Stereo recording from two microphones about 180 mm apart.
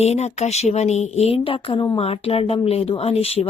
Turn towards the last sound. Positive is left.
turn(degrees=35)  # may be behind; listen again after turning